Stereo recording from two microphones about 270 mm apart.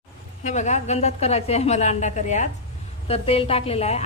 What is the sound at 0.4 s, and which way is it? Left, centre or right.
A woman's voice, left.